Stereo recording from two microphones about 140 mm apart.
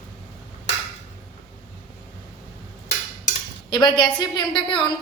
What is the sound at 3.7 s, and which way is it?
A woman's voice, 35° left (ahead or behind).